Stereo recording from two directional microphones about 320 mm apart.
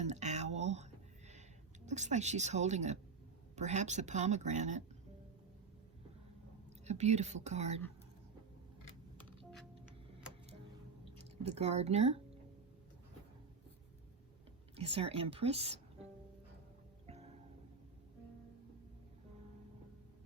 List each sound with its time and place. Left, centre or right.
0.0 s a sound: right
3.5 s speech: right
6.8 s speech: right
11.4 s speech: centre
14.8 s speech: centre